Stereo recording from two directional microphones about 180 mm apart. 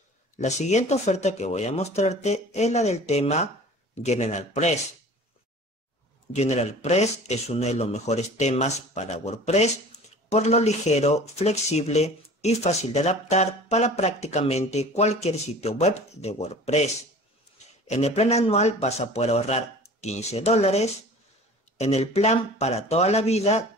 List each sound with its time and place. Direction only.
0.4 s speech: 40° left (ahead or behind)
6.3 s speech: 40° left (ahead or behind)